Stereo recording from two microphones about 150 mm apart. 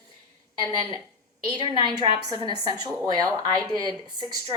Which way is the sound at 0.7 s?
30° right (ahead or behind).